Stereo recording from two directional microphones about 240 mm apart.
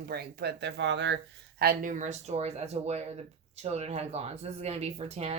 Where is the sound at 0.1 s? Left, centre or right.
Right.